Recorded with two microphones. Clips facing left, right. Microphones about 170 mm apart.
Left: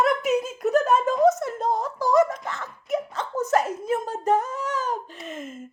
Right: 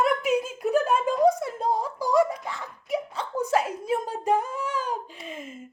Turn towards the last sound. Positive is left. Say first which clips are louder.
# left 2 dB
turn(degrees=-10)  # may be behind; listen again after turning